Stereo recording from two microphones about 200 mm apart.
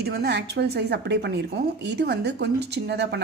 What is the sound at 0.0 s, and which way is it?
A woman's voice, 55° right (ahead or behind).